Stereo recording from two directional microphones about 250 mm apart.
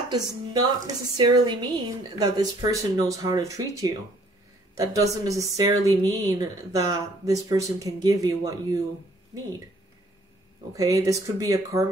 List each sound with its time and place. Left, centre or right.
0.1 s speech: centre
10.7 s speech: centre